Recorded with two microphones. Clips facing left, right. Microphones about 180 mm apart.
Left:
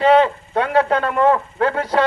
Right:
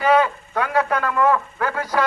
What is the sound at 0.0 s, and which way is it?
A man's voice, 25° left (ahead or behind).